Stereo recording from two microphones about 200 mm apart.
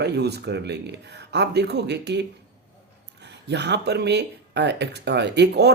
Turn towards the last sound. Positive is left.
turn(degrees=-55)  # may be behind; listen again after turning